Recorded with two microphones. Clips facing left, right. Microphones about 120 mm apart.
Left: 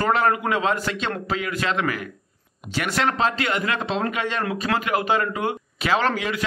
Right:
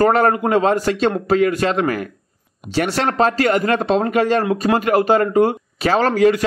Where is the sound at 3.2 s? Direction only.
45° right (ahead or behind).